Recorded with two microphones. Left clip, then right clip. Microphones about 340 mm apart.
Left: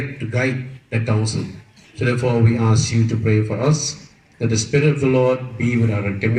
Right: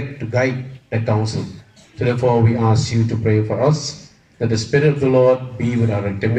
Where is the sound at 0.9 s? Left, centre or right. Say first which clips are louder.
Right 3 dB; right.